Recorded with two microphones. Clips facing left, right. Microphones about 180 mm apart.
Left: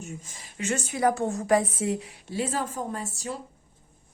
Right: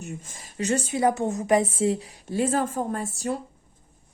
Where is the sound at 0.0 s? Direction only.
50° right (ahead or behind); by 2.0 s 30° right (ahead or behind).